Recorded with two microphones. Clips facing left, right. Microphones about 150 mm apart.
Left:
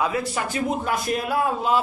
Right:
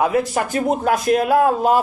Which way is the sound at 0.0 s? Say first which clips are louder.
Right 6 dB; 55° right (ahead or behind).